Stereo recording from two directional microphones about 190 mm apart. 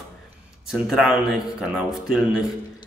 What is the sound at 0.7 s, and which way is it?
Speech, centre (ahead or behind).